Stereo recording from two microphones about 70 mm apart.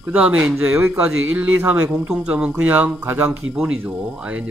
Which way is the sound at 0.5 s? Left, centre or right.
Right.